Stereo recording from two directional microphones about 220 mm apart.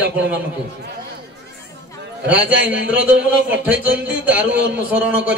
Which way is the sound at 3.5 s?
5° right (ahead or behind).